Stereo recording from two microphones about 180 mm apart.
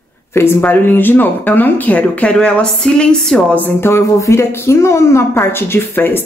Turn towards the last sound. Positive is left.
turn(degrees=10)  # may be behind; listen again after turning